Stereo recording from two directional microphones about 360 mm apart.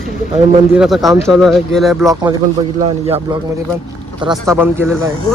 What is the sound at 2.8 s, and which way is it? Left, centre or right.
Speech, centre.